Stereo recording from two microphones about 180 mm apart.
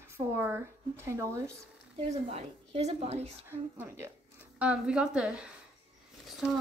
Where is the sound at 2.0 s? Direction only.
35° right (ahead or behind).